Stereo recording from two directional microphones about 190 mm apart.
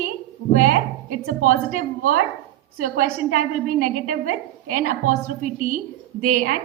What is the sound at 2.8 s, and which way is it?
A woman's voice, 45° right (ahead or behind).